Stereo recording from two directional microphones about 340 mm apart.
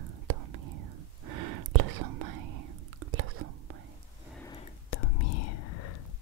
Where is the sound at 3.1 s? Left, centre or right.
Right.